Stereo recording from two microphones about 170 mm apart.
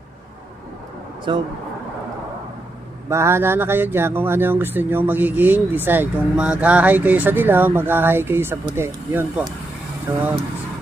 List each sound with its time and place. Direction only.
1.3 s speech: 30° right (ahead or behind)
3.1 s speech: 15° right (ahead or behind)